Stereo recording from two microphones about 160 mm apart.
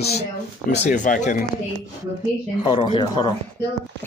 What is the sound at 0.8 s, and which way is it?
Speech, 50° left (ahead or behind).